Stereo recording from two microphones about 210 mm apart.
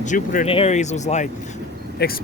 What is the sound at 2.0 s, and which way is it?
Speech, 50° left (ahead or behind).